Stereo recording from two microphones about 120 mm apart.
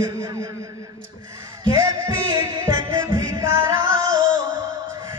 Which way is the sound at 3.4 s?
25° right (ahead or behind).